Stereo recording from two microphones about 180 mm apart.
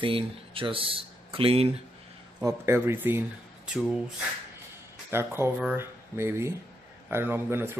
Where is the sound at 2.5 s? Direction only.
15° right (ahead or behind).